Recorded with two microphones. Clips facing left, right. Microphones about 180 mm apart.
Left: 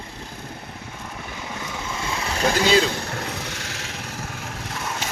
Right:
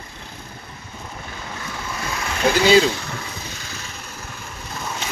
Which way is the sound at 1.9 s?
25° left (ahead or behind).